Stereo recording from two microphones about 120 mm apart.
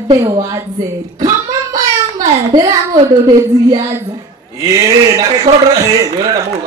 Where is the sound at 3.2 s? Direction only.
35° right (ahead or behind).